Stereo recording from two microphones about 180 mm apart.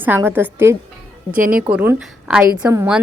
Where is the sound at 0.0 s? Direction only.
10° right (ahead or behind).